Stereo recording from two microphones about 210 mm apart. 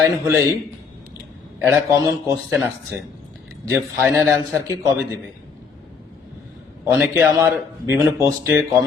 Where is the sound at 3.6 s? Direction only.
5° right (ahead or behind).